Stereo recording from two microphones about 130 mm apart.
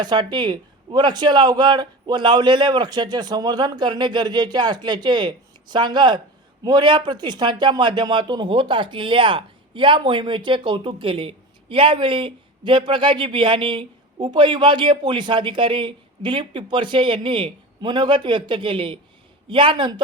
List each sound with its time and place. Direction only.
0.0 s speech: 35° right (ahead or behind)